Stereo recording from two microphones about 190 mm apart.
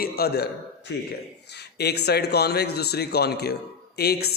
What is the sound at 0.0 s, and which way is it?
Speech, 55° left (ahead or behind).